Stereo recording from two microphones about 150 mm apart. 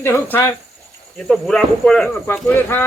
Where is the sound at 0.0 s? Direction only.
15° left (ahead or behind).